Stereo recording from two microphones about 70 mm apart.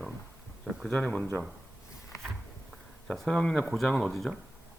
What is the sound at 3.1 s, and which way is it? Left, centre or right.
Speech, centre.